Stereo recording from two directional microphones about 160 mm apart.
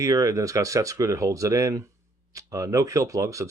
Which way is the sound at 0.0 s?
20° right (ahead or behind).